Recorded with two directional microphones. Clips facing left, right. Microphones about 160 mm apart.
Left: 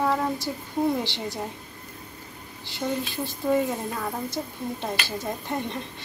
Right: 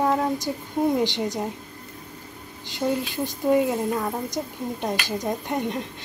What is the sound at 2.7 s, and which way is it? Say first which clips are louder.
A woman's voice: right 4 dB; 15° right (ahead or behind).